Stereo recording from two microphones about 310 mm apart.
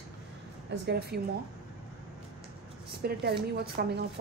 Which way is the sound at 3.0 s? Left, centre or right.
Right.